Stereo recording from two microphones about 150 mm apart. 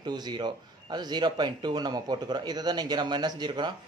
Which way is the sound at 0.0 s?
30° right (ahead or behind).